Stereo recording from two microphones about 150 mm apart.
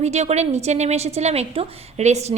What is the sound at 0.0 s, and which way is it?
A woman's voice, 45° right (ahead or behind).